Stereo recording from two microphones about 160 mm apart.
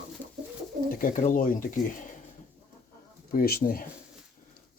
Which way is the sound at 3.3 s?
70° left (ahead or behind).